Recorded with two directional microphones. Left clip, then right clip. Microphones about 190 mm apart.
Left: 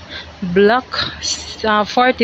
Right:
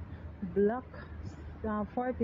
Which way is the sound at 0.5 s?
25° left (ahead or behind).